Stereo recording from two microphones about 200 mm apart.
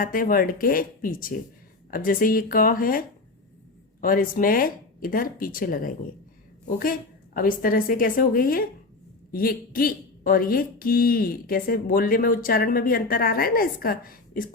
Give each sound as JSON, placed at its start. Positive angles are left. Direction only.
{"t": 0.0, "sound": "speech", "side_deg": 45}
{"t": 4.0, "sound": "speech", "side_deg": 45}